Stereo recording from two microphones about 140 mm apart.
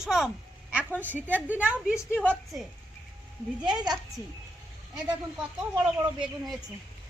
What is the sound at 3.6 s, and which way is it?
Speech, 30° right (ahead or behind).